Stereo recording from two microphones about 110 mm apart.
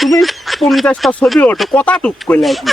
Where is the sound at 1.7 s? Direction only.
10° left (ahead or behind).